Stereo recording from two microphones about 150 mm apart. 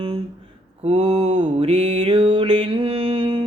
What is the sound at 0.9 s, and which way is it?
Mantra, 45° right (ahead or behind).